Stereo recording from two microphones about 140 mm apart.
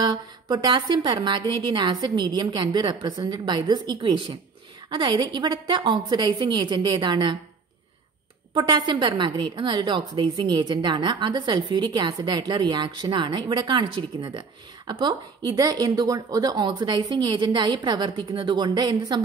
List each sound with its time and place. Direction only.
0.0 s a woman's voice: 30° right (ahead or behind)
8.5 s a woman's voice: 30° right (ahead or behind)